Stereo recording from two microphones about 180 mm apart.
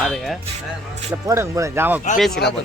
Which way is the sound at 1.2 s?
15° right (ahead or behind).